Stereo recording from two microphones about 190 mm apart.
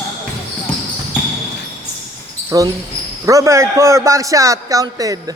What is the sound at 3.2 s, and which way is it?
Speech, 15° right (ahead or behind).